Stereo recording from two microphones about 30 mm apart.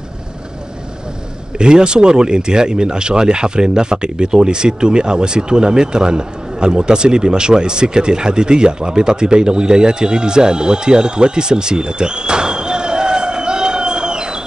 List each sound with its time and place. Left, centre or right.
1.6 s speech: right